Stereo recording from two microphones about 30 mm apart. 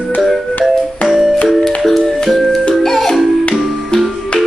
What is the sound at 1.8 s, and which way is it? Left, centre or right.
Music, centre.